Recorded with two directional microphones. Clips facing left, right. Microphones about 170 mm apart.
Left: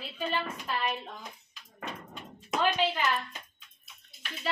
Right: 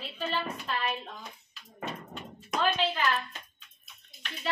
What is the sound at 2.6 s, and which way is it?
Speech, 10° left (ahead or behind).